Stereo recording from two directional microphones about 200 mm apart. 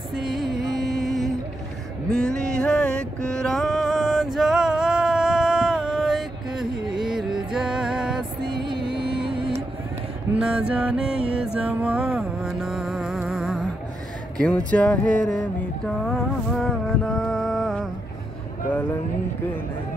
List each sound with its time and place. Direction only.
0.1 s music: centre (ahead or behind)
0.8 s a sound: centre (ahead or behind)
2.1 s music: 5° left (ahead or behind)
8.5 s music: 25° right (ahead or behind)
10.3 s music: 5° right (ahead or behind)
14.4 s a sound: 5° left (ahead or behind)